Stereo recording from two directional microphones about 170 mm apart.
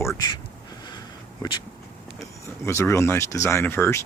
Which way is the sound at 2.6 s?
15° left (ahead or behind).